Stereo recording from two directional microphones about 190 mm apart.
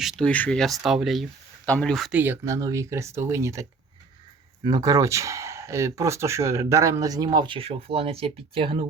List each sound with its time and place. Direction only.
0.0 s speech: centre (ahead or behind)
2.2 s speech: 10° right (ahead or behind); by 8.8 s 30° right (ahead or behind)